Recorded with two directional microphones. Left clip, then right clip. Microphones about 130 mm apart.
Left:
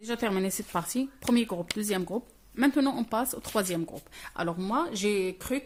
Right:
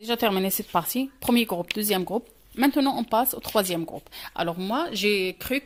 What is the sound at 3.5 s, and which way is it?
Speech, 30° right (ahead or behind).